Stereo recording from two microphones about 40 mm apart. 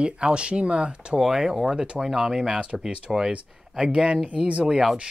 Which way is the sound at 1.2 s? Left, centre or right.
Centre.